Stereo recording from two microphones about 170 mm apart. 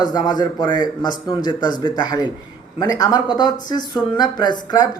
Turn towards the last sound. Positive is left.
turn(degrees=25)  # may be behind; listen again after turning